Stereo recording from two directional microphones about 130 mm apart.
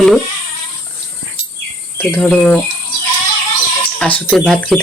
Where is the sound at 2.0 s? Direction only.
10° left (ahead or behind).